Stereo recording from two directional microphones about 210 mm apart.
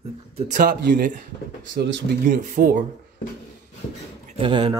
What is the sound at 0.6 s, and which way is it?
Speech, 40° right (ahead or behind).